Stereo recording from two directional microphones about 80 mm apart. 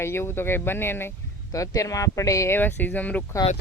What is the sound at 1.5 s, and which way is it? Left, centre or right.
Speech, left.